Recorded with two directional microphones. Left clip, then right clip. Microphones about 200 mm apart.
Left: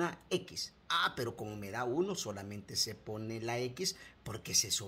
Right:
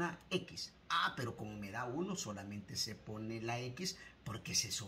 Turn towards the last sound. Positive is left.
turn(degrees=55)  # may be behind; listen again after turning